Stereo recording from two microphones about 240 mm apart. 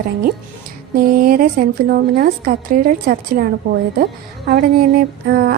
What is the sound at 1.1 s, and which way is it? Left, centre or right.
A woman's voice, right.